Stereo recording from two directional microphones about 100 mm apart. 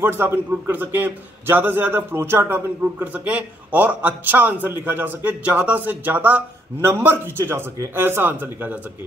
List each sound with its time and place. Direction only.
0.0 s a man's voice: 20° right (ahead or behind)